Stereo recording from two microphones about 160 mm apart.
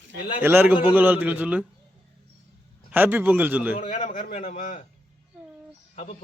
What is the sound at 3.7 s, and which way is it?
A man's voice, 45° left (ahead or behind).